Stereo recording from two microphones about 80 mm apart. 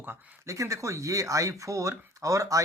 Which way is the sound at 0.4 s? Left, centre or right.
Right.